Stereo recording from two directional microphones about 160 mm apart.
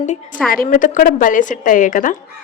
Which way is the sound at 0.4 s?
60° left (ahead or behind).